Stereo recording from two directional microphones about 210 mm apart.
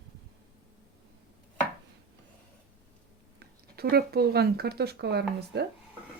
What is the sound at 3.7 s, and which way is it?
Speech, 50° right (ahead or behind).